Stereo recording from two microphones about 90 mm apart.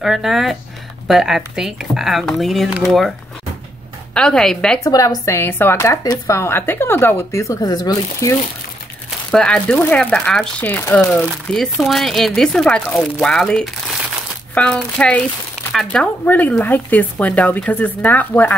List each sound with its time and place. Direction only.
0.0 s speech: 5° right (ahead or behind)
4.1 s speech: 10° left (ahead or behind)
4.8 s speech: 40° left (ahead or behind)
7.4 s speech: 45° left (ahead or behind)
9.3 s speech: 10° left (ahead or behind)
10.1 s speech: 5° left (ahead or behind)
10.6 s speech: 25° left (ahead or behind)
11.5 s speech: 10° left (ahead or behind)
16.3 s speech: 20° left (ahead or behind)